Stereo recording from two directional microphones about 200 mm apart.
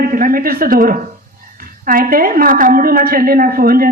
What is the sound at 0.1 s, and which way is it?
A woman's voice, 45° right (ahead or behind).